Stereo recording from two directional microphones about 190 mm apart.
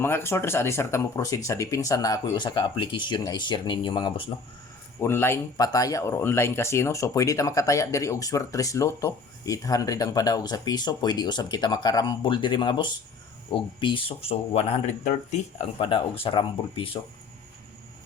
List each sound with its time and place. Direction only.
0.0 s speech: 10° left (ahead or behind)
4.9 s speech: 10° left (ahead or behind); by 17.0 s 30° left (ahead or behind)